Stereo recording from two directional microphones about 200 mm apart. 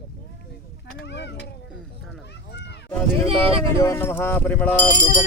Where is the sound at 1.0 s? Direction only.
60° left (ahead or behind).